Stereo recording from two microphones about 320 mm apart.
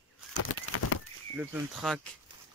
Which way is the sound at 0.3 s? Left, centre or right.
Left.